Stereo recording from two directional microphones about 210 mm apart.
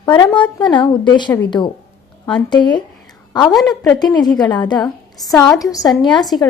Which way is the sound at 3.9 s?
20° left (ahead or behind).